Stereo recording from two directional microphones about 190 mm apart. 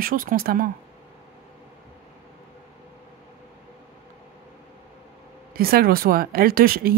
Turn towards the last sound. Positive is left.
turn(degrees=-50)  # may be behind; listen again after turning